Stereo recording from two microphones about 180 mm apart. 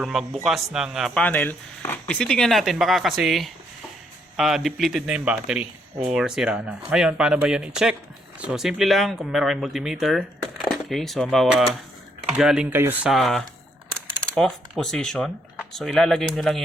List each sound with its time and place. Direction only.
0.0 s speech: centre (ahead or behind)
13.1 s speech: centre (ahead or behind)